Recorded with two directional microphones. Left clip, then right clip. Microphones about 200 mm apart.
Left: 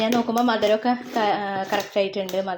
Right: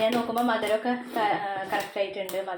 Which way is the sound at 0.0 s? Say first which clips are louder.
Left 3 dB; 50° left (ahead or behind).